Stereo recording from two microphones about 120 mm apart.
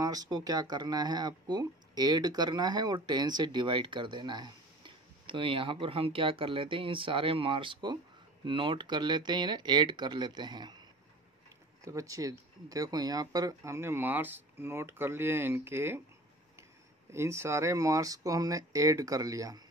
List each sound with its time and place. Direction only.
0.0 s speech: 30° right (ahead or behind)
11.8 s speech: 25° right (ahead or behind)
17.1 s speech: 25° right (ahead or behind)